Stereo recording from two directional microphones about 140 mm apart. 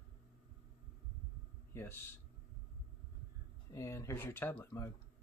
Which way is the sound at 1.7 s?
15° left (ahead or behind).